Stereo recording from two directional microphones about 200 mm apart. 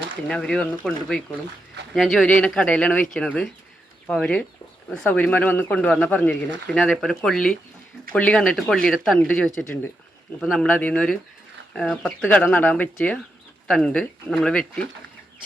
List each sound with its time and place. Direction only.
0.3 s speech: 5° left (ahead or behind)